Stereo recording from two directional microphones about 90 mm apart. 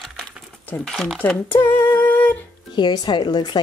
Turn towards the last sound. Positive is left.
turn(degrees=55)  # may be behind; listen again after turning